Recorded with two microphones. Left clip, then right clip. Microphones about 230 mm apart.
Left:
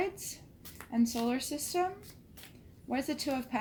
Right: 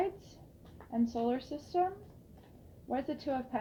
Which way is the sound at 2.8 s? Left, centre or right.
Left.